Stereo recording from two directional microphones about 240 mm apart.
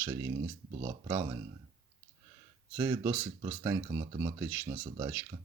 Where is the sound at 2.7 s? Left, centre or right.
Centre.